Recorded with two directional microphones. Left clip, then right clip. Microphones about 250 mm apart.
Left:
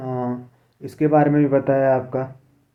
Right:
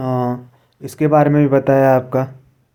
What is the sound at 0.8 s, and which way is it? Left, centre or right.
Speech, centre.